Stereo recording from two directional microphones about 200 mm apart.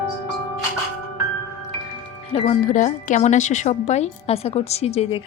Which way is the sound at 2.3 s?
35° left (ahead or behind).